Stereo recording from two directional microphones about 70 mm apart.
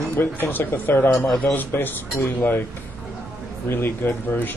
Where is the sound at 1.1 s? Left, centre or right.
Centre.